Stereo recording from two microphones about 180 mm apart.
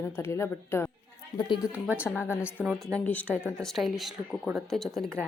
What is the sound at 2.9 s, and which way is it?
Speech, 10° left (ahead or behind).